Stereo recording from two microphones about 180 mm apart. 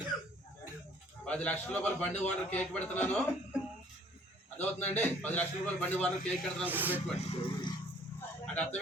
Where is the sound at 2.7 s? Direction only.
10° left (ahead or behind).